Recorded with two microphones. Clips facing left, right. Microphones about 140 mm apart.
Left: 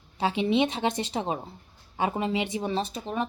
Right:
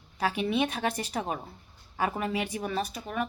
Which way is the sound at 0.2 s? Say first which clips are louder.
Left 3 dB; 20° left (ahead or behind).